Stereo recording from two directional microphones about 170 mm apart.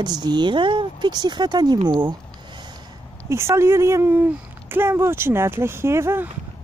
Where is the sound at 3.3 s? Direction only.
15° right (ahead or behind).